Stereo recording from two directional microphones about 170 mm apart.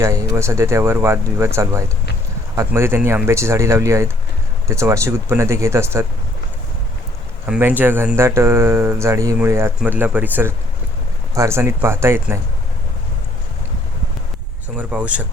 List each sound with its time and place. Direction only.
0.3 s speech: 15° right (ahead or behind)
7.4 s speech: 10° right (ahead or behind)
14.8 s speech: 10° right (ahead or behind)